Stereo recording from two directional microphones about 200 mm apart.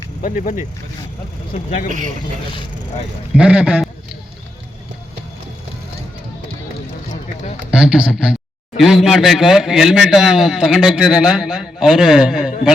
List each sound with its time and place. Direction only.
0.2 s speech: 45° left (ahead or behind)
1.5 s speech: 30° left (ahead or behind)
3.3 s a man's voice: 5° right (ahead or behind)
7.7 s a man's voice: 5° right (ahead or behind)